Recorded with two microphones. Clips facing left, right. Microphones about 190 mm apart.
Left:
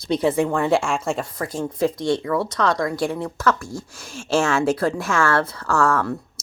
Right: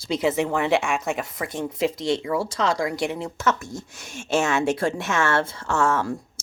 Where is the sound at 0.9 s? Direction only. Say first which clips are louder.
Left 2 dB; 20° right (ahead or behind).